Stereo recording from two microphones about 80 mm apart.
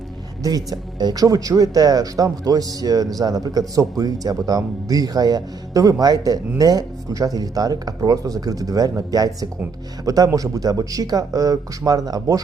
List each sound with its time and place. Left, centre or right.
0.4 s speech: right